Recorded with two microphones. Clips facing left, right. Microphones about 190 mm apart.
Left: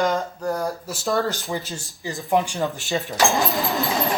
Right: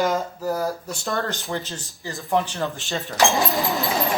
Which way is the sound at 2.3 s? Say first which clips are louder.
Left 2 dB; 15° left (ahead or behind).